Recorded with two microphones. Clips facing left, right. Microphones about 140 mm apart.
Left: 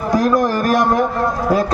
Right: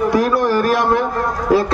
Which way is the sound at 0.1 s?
45° left (ahead or behind).